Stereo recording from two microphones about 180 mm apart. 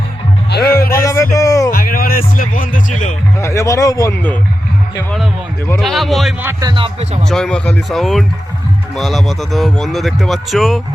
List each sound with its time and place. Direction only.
0.7 s a sound: 15° left (ahead or behind)
1.7 s speech: 55° left (ahead or behind)
3.4 s speech: 15° left (ahead or behind)
5.6 s a man's voice: 5° left (ahead or behind)
6.4 s speech: 15° right (ahead or behind)
7.3 s a man's voice: centre (ahead or behind)